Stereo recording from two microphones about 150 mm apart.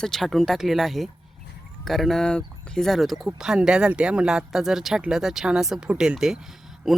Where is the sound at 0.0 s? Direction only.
Centre (ahead or behind).